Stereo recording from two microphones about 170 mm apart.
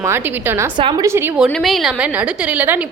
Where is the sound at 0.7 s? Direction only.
30° right (ahead or behind).